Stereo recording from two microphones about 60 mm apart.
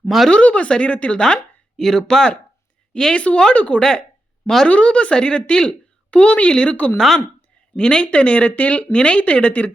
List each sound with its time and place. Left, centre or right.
0.3 s a woman's voice: centre
7.8 s a woman's voice: centre